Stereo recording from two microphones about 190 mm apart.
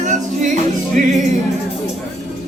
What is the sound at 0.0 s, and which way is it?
Music, 40° right (ahead or behind).